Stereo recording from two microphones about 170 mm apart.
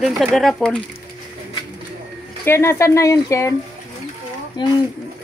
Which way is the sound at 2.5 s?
15° left (ahead or behind).